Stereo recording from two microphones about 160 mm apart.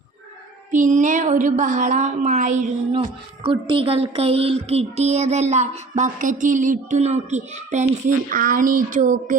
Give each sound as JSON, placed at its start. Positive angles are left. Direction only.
{"t": 0.7, "sound": "speech", "side_deg": -50}
{"t": 2.9, "sound": "speech", "side_deg": -35}